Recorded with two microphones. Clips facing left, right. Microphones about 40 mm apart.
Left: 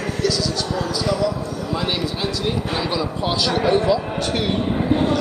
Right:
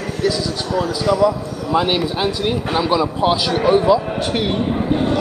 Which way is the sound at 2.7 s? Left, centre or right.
Centre.